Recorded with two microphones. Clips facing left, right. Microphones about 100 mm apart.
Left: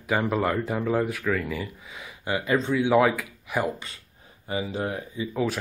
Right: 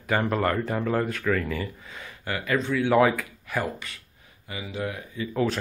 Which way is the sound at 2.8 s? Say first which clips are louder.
Right 1 dB; 5° left (ahead or behind).